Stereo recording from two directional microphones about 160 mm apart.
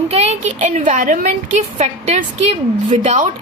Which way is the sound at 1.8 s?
40° right (ahead or behind).